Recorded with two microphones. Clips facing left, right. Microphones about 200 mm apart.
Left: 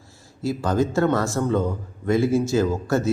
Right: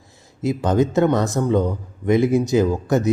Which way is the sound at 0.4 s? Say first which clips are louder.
Right 3 dB; 20° right (ahead or behind).